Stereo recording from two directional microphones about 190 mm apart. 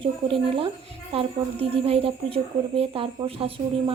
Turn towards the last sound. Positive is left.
turn(degrees=-30)  # may be behind; listen again after turning